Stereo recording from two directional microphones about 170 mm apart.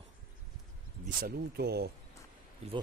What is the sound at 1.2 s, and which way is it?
Speech, 65° right (ahead or behind).